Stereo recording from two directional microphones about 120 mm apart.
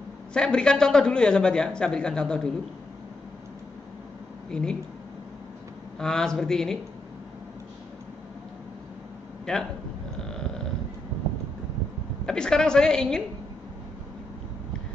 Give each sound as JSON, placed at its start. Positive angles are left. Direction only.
{"t": 0.3, "sound": "a man's voice", "side_deg": 5}
{"t": 4.5, "sound": "a man's voice", "side_deg": 5}
{"t": 5.9, "sound": "a woman's voice", "side_deg": 5}
{"t": 9.5, "sound": "a woman's voice", "side_deg": 5}
{"t": 12.3, "sound": "a woman's voice", "side_deg": 5}